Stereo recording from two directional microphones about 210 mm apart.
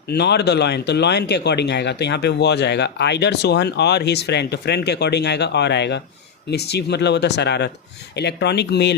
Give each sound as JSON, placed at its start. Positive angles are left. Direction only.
{"t": 0.1, "sound": "speech", "side_deg": 50}